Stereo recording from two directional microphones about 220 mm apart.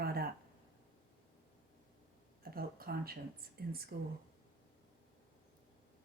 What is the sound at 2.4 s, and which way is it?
Speech, 45° right (ahead or behind).